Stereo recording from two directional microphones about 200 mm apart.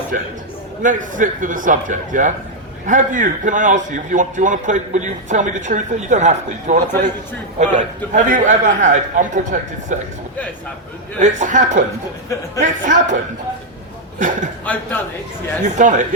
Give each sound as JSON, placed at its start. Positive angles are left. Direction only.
{"t": 0.8, "sound": "a man's voice", "side_deg": -40}
{"t": 11.2, "sound": "a man's voice", "side_deg": -40}
{"t": 12.8, "sound": "a man's voice", "side_deg": -40}
{"t": 14.2, "sound": "a man's voice", "side_deg": -40}
{"t": 14.6, "sound": "a man's voice", "side_deg": 5}
{"t": 15.6, "sound": "a man's voice", "side_deg": -40}